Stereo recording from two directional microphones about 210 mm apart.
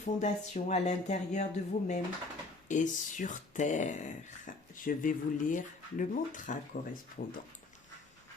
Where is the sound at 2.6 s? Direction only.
35° left (ahead or behind).